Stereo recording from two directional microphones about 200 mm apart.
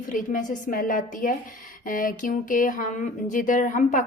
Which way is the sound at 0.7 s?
45° left (ahead or behind).